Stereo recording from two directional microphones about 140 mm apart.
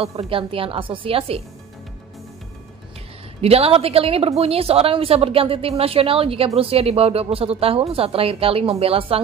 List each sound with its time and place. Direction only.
0.0 s a woman's voice: 40° right (ahead or behind)
3.3 s speech: 45° right (ahead or behind)